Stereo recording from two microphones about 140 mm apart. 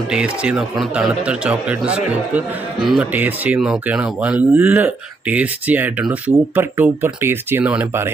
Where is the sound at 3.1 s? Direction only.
15° right (ahead or behind).